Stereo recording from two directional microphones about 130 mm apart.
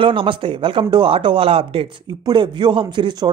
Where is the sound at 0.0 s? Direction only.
40° right (ahead or behind).